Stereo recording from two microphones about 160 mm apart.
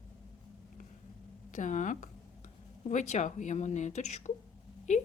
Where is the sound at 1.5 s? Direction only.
50° left (ahead or behind).